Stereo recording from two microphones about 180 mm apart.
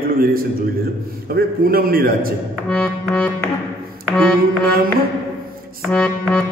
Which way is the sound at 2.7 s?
5° left (ahead or behind).